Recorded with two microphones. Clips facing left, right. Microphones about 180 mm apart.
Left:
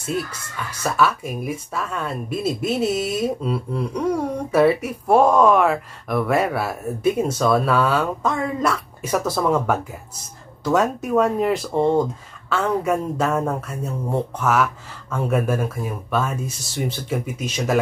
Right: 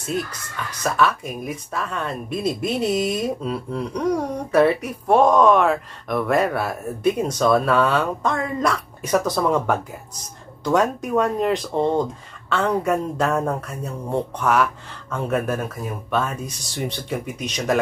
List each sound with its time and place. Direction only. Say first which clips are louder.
0.0 s speech: even; 5° left (ahead or behind)